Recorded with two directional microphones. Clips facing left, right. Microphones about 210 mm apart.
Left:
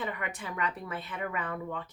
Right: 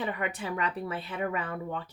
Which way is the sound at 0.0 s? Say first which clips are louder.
Right 4 dB; 35° right (ahead or behind).